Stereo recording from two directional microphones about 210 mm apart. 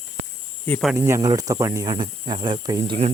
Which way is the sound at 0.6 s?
10° left (ahead or behind).